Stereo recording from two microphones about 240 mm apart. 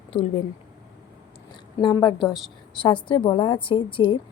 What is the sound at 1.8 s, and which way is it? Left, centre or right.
A woman's voice, centre.